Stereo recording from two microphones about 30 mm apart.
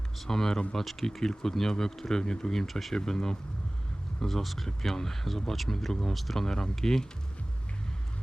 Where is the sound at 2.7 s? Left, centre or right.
Centre.